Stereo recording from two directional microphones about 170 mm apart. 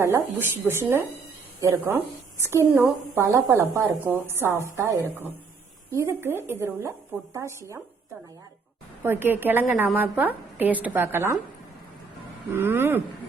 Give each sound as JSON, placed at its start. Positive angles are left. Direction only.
{"t": 0.0, "sound": "a woman's voice", "side_deg": -15}
{"t": 9.0, "sound": "a woman's voice", "side_deg": -10}
{"t": 12.5, "sound": "a woman's voice", "side_deg": -15}